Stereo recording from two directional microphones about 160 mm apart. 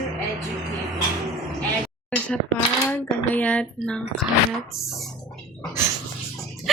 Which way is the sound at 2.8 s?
10° left (ahead or behind).